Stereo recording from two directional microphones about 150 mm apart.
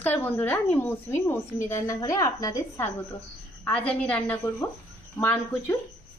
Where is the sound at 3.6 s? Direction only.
10° left (ahead or behind).